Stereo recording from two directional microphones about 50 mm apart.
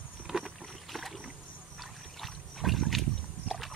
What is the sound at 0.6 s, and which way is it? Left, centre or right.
Rowboat, centre.